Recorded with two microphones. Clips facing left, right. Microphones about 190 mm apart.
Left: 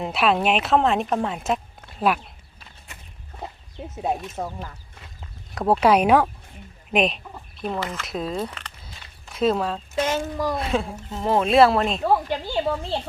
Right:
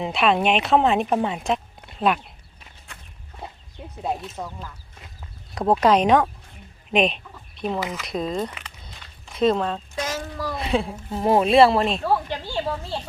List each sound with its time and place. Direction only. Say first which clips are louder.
0.0 s speech: right 1 dB; centre (ahead or behind)
3.4 s chicken: left 3 dB; 25° left (ahead or behind)
4.4 s speech: left 3 dB; 35° left (ahead or behind)
5.5 s speech: even; centre (ahead or behind)
8.4 s speech: even; 5° right (ahead or behind)
9.3 s speech: right 1 dB; 5° left (ahead or behind)
10.1 s a child's voice: left 4 dB; 25° left (ahead or behind)
10.5 s speech: even; centre (ahead or behind)
11.1 s speech: right 3 dB; 10° right (ahead or behind)
11.4 s speech: left 1 dB; centre (ahead or behind)
12.0 s speech: left 2 dB; 15° left (ahead or behind)